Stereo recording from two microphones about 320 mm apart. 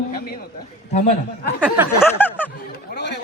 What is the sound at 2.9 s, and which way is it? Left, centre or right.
Chatter, left.